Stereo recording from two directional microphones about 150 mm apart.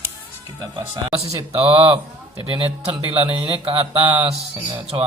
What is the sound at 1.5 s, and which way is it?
Speech, 40° right (ahead or behind).